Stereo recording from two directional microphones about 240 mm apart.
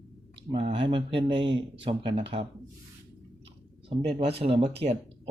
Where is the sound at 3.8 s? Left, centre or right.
Right.